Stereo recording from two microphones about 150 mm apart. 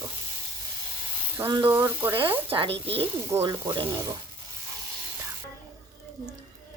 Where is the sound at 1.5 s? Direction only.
25° right (ahead or behind).